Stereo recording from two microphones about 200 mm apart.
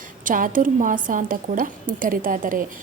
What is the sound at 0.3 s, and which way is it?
A woman's voice, 40° right (ahead or behind).